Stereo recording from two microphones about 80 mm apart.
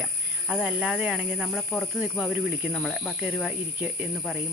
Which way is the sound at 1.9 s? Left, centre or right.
Centre.